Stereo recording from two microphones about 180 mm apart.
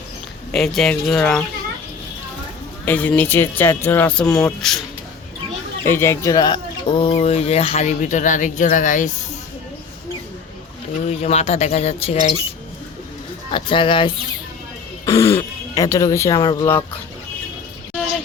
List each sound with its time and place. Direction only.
0.5 s speech: centre (ahead or behind)
2.8 s speech: 10° left (ahead or behind)
5.8 s speech: 15° left (ahead or behind)
7.0 s speech: 35° left (ahead or behind)
11.0 s speech: 35° left (ahead or behind)
13.5 s speech: 30° left (ahead or behind)
15.0 s speech: 15° left (ahead or behind)